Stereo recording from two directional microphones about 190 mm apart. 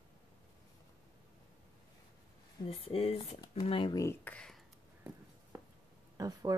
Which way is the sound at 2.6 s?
30° left (ahead or behind).